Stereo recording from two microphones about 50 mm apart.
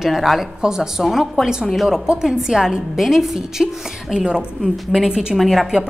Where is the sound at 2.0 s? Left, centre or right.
Centre.